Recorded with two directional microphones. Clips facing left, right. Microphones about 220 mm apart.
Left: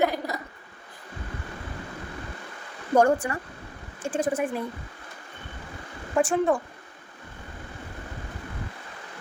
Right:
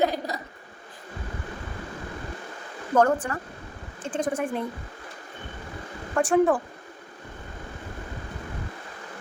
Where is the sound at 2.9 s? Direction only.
10° left (ahead or behind).